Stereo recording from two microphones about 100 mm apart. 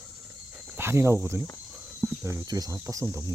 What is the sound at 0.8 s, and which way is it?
Speech, 25° right (ahead or behind).